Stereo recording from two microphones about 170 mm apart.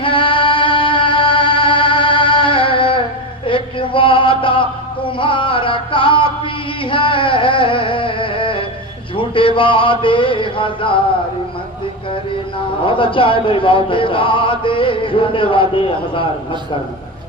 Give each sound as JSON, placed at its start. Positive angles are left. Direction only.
{"t": 0.0, "sound": "music", "side_deg": 30}
{"t": 3.4, "sound": "male singing", "side_deg": 30}
{"t": 5.0, "sound": "a sound", "side_deg": 30}
{"t": 12.8, "sound": "a man's voice", "side_deg": 30}